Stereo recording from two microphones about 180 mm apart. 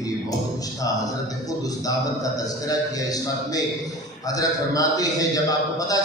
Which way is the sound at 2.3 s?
20° left (ahead or behind).